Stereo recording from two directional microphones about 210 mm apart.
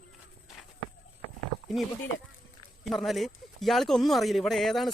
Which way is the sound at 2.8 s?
Centre (ahead or behind).